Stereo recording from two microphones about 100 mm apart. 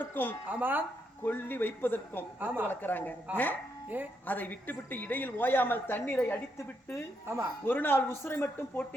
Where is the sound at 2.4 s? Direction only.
20° right (ahead or behind).